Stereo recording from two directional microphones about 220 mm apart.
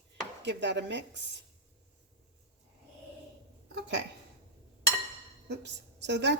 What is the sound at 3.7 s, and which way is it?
Speech, 50° right (ahead or behind).